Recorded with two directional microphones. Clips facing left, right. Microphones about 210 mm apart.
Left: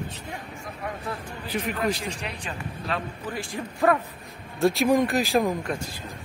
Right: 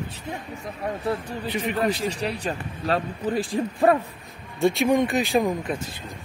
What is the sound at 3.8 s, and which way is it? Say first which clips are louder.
Speech: right 2 dB; 30° right (ahead or behind).